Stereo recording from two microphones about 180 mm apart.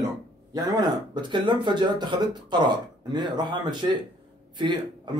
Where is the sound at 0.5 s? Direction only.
25° right (ahead or behind).